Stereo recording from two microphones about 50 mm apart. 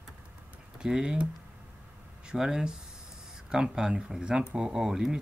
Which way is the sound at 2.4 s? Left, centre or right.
Centre.